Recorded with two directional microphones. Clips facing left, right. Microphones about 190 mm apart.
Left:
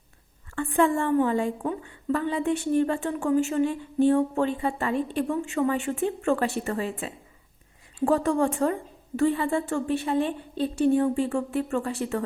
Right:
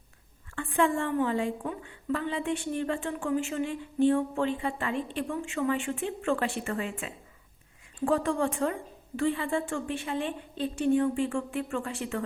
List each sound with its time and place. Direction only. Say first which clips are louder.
0.5 s a woman's voice: left 4 dB; 45° left (ahead or behind)